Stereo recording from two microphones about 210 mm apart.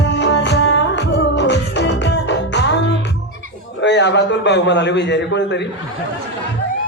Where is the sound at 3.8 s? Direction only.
55° left (ahead or behind).